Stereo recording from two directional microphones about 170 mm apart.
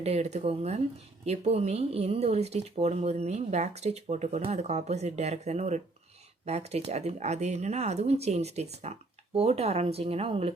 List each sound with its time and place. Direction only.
0.0 s speech: 40° right (ahead or behind)